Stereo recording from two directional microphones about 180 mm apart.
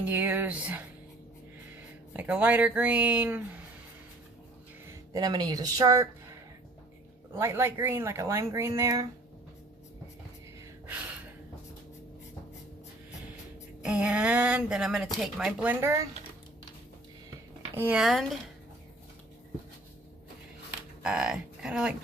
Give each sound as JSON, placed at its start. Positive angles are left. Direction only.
{"t": 0.0, "sound": "speech", "side_deg": -10}
{"t": 4.9, "sound": "speech", "side_deg": -20}
{"t": 7.3, "sound": "speech", "side_deg": -15}
{"t": 13.8, "sound": "speech", "side_deg": -5}
{"t": 17.7, "sound": "speech", "side_deg": -10}
{"t": 21.0, "sound": "speech", "side_deg": -5}